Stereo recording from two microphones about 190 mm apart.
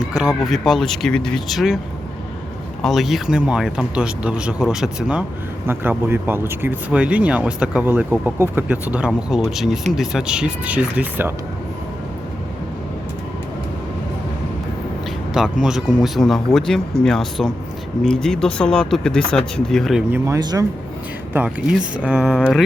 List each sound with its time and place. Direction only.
0.2 s speech: centre (ahead or behind)
2.8 s speech: centre (ahead or behind)
15.6 s speech: centre (ahead or behind)
20.1 s speech: 15° right (ahead or behind)
21.3 s speech: 5° right (ahead or behind)